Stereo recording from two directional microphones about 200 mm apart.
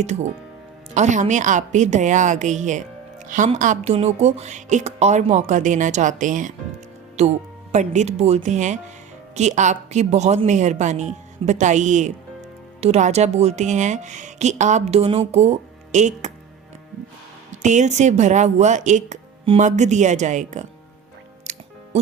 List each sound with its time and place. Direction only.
0.0 s speech: 35° right (ahead or behind)
17.5 s speech: 35° right (ahead or behind)
21.5 s music: 35° right (ahead or behind)